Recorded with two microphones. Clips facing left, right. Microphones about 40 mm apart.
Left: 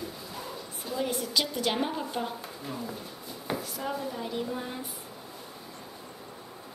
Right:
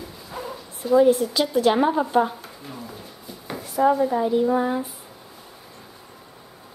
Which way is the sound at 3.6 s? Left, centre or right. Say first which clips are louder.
Right 15 dB; centre.